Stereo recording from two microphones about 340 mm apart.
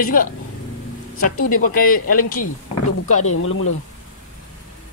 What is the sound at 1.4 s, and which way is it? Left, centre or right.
Speech, left.